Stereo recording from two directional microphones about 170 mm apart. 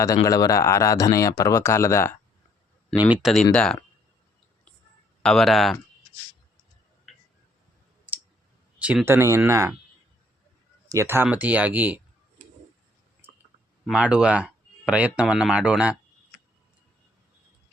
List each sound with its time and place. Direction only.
0.3 s speech: 20° left (ahead or behind)
3.1 s speech: 5° right (ahead or behind)
5.2 s speech: centre (ahead or behind)
7.1 s a sound: centre (ahead or behind)
8.1 s clicking: 10° right (ahead or behind)
8.8 s speech: 10° right (ahead or behind)
10.8 s speech: 15° right (ahead or behind)
13.8 s speech: 5° right (ahead or behind)